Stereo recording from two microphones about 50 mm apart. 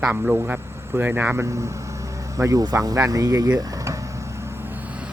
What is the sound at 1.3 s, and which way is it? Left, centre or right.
Speech, right.